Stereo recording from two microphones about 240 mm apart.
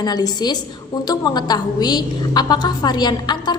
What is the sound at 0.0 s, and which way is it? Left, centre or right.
A woman's voice, centre.